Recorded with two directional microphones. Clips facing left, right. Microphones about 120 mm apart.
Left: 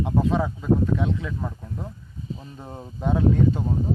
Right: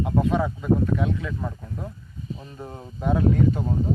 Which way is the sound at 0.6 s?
20° left (ahead or behind).